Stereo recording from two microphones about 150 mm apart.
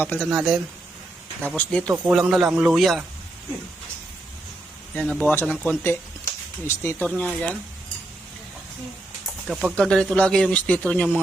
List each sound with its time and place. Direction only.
0.0 s speech: 10° left (ahead or behind)
0.3 s speech: centre (ahead or behind)
1.9 s speech: 10° right (ahead or behind)
4.9 s speech: centre (ahead or behind)
5.2 s speech: 15° left (ahead or behind)
9.5 s speech: centre (ahead or behind)